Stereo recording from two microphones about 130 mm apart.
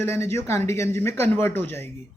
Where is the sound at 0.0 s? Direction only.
20° left (ahead or behind).